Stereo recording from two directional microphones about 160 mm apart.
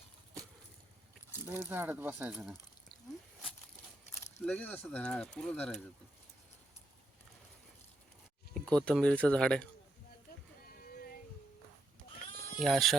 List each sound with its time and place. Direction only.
1.6 s speech: 15° right (ahead or behind)
4.4 s speech: 10° left (ahead or behind)
8.5 s speech: 5° left (ahead or behind)
10.7 s a sound: 65° left (ahead or behind)
12.5 s speech: centre (ahead or behind)